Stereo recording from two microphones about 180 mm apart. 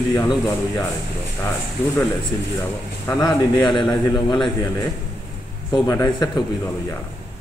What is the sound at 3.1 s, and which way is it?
A man's voice, 15° left (ahead or behind).